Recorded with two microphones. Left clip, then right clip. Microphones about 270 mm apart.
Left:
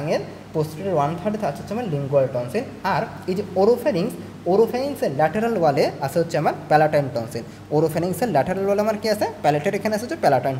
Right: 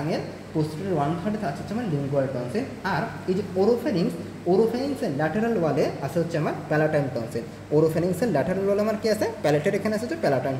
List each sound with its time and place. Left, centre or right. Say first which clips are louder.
0.1 s speech: left 5 dB; left
2.5 s a woman's voice: left 4 dB; left